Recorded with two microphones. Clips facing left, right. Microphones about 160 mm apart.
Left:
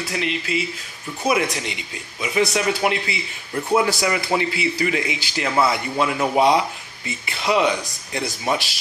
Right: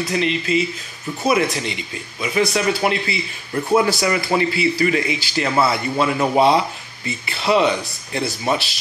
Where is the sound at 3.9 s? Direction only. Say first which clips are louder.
Right 2 dB; 15° left (ahead or behind).